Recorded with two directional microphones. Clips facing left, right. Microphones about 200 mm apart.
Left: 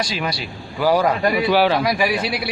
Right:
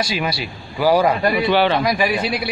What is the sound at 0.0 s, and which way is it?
A man's voice, 5° right (ahead or behind).